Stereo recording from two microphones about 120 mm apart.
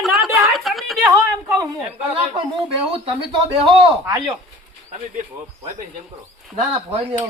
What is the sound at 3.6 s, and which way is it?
Speech, 40° right (ahead or behind).